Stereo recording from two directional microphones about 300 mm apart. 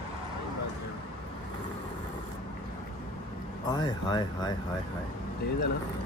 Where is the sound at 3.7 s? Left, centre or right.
Centre.